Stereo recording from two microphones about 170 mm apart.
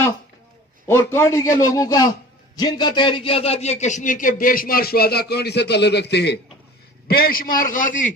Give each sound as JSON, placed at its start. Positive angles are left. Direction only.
{"t": 0.9, "sound": "a man's voice", "side_deg": 15}
{"t": 7.1, "sound": "a man's voice", "side_deg": 60}